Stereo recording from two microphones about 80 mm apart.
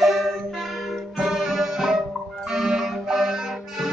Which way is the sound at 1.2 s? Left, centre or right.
Centre.